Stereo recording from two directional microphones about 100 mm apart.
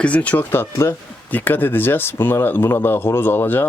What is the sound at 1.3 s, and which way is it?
Speech, 20° left (ahead or behind).